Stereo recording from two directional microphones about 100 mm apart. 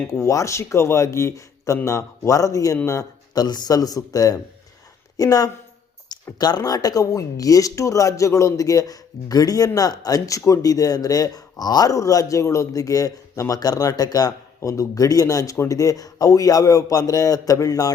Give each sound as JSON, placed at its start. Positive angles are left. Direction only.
{"t": 0.1, "sound": "speech", "side_deg": 30}